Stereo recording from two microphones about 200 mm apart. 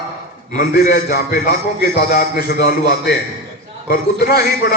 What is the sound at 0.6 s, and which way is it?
A man's voice, 45° left (ahead or behind).